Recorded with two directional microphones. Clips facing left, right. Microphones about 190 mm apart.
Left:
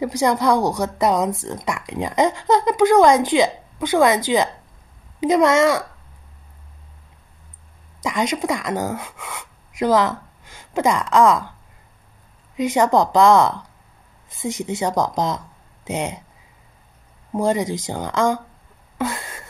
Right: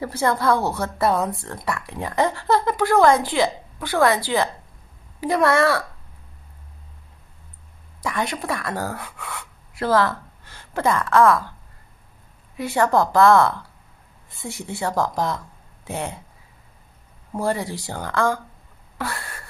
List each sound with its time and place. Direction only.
0.0 s speech: 15° left (ahead or behind)
8.0 s speech: 15° left (ahead or behind)
12.5 s speech: 20° left (ahead or behind)
17.3 s speech: 20° left (ahead or behind)
18.9 s a sound: 20° left (ahead or behind)